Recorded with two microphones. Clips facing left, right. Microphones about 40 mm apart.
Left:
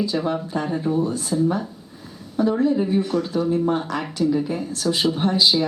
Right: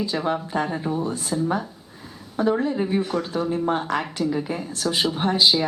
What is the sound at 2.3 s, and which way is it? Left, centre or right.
Speech, centre.